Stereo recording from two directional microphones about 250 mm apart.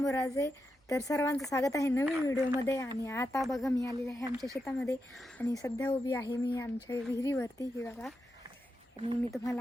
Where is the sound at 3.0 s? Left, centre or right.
Centre.